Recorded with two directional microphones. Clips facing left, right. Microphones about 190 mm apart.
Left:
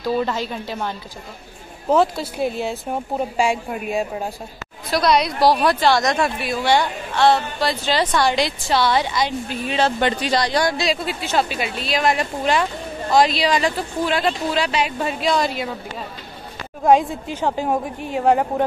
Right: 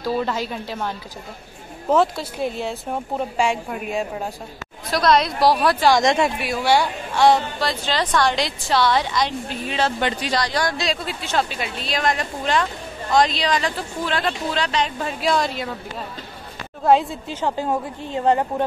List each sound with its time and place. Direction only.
0.0 s a woman's voice: centre (ahead or behind)
7.6 s speech: 5° left (ahead or behind)
9.8 s speech: 25° left (ahead or behind)
10.6 s speech: 5° left (ahead or behind)
16.8 s speech: 15° left (ahead or behind)